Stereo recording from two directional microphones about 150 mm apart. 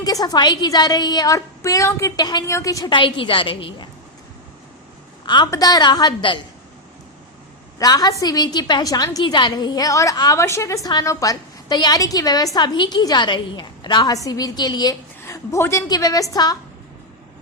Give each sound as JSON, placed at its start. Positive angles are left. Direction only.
{"t": 0.0, "sound": "a woman's voice", "side_deg": 25}
{"t": 5.2, "sound": "a woman's voice", "side_deg": 30}
{"t": 7.8, "sound": "a woman's voice", "side_deg": 25}
{"t": 15.2, "sound": "a woman's voice", "side_deg": 15}